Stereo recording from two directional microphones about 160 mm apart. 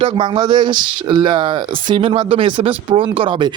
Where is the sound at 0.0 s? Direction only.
30° right (ahead or behind).